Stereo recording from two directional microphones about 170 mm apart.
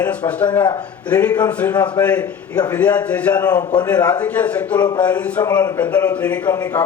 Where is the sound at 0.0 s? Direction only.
10° left (ahead or behind).